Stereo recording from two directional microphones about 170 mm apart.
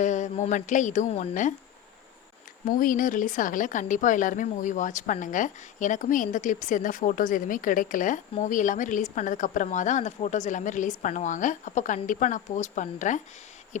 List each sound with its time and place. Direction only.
0.0 s a woman's voice: 45° left (ahead or behind)
2.6 s a woman's voice: 55° left (ahead or behind)